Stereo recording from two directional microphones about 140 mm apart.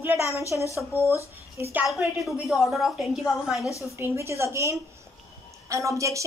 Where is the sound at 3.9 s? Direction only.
20° right (ahead or behind).